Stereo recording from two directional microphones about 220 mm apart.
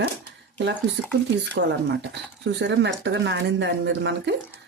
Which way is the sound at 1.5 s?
50° right (ahead or behind).